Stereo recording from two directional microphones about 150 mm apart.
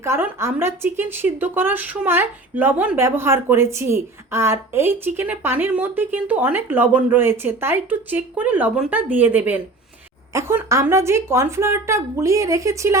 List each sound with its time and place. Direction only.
0.0 s a woman's voice: 15° right (ahead or behind)